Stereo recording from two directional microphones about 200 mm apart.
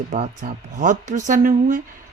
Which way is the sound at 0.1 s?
40° right (ahead or behind).